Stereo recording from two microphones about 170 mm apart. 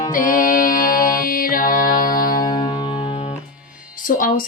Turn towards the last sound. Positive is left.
turn(degrees=55)  # may be behind; listen again after turning